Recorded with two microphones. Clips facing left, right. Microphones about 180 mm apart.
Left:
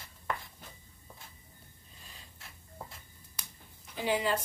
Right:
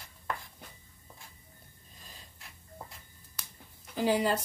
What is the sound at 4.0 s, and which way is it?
Speech, 40° right (ahead or behind).